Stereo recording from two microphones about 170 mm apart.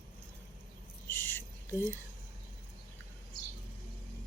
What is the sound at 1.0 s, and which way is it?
Owl, 15° left (ahead or behind).